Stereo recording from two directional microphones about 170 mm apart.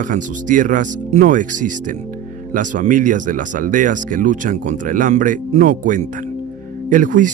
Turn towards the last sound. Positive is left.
turn(degrees=-50)  # may be behind; listen again after turning